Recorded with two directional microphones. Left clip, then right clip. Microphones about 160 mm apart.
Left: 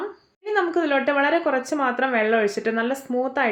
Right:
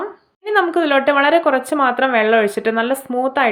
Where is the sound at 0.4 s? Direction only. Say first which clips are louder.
Right 6 dB; 30° right (ahead or behind).